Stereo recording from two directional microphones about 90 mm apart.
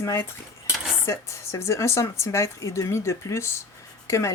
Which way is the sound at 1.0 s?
35° left (ahead or behind).